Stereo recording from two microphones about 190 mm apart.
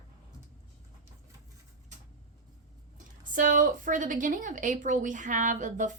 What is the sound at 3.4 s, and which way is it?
A woman's voice, 45° right (ahead or behind).